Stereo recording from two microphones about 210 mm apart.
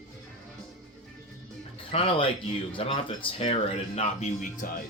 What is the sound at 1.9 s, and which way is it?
Speech, 25° left (ahead or behind).